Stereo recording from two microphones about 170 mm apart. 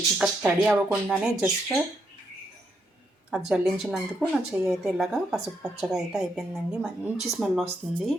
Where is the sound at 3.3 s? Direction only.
5° right (ahead or behind).